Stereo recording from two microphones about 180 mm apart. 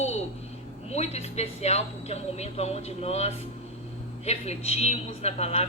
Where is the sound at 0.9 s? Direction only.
35° left (ahead or behind).